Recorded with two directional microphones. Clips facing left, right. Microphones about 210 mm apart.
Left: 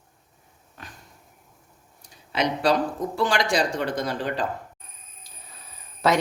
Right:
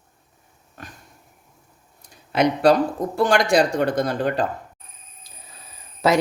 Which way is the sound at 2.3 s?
55° right (ahead or behind).